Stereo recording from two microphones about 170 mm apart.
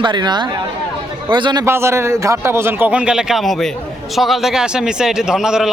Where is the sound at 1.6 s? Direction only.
15° right (ahead or behind).